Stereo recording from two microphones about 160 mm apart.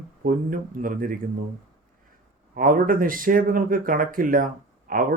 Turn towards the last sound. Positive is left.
turn(degrees=-65)  # may be behind; listen again after turning